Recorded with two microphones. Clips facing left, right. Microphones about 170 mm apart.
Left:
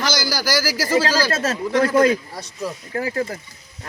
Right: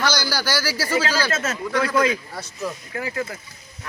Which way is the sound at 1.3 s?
30° left (ahead or behind).